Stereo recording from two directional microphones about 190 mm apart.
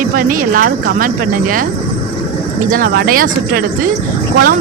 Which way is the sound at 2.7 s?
45° right (ahead or behind).